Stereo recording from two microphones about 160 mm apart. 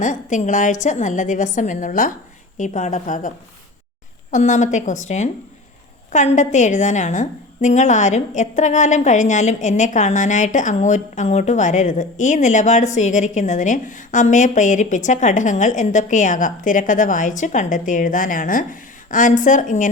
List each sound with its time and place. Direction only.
0.0 s a woman's voice: 50° left (ahead or behind)